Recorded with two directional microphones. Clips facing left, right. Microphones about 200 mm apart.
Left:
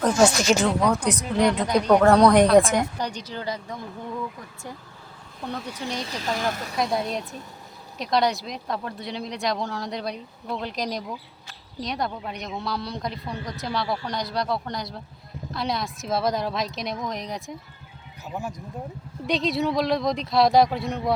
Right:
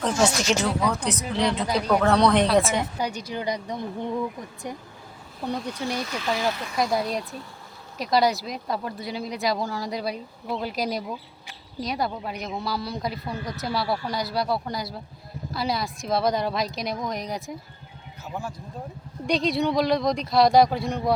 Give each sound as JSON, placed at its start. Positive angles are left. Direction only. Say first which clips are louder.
{"t": 0.8, "sound": "speech", "louder": "left 3 dB", "side_deg": 0}
{"t": 2.2, "sound": "speech", "louder": "left 4 dB", "side_deg": 15}
{"t": 2.5, "sound": "a woman's voice", "louder": "left 4 dB", "side_deg": -5}
{"t": 5.5, "sound": "speech", "louder": "right 1 dB", "side_deg": 10}
{"t": 6.0, "sound": "speech", "louder": "right 2 dB", "side_deg": 30}
{"t": 6.3, "sound": "speech", "louder": "right 1 dB", "side_deg": 50}
{"t": 6.7, "sound": "speech", "louder": "right 1 dB", "side_deg": 0}
{"t": 18.3, "sound": "speech", "louder": "left 1 dB", "side_deg": 20}
{"t": 19.3, "sound": "speech", "louder": "right 1 dB", "side_deg": 0}